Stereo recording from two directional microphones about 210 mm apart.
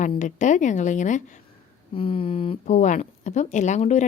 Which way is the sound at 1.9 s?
25° left (ahead or behind).